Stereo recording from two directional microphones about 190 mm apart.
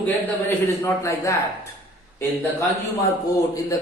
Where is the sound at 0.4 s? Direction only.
15° left (ahead or behind).